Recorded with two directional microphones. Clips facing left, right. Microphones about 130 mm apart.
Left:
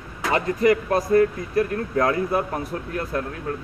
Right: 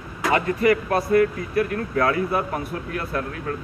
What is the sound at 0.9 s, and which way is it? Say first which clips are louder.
A man's voice: even; 35° left (ahead or behind).